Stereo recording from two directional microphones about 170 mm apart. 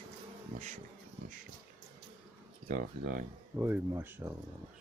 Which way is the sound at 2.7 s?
55° right (ahead or behind).